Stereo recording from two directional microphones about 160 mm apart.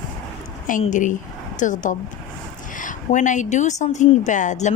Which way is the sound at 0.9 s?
50° left (ahead or behind).